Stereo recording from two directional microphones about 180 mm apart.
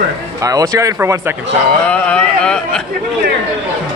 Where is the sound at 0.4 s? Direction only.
20° right (ahead or behind).